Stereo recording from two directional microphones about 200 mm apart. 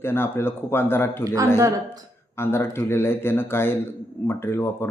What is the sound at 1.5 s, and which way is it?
Speech, 20° right (ahead or behind).